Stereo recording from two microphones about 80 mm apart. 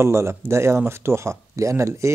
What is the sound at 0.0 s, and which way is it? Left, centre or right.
A man's voice, right.